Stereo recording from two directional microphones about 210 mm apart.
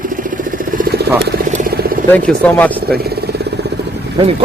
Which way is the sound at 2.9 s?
50° right (ahead or behind).